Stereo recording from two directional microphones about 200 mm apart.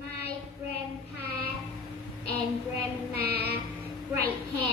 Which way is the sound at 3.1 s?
50° right (ahead or behind).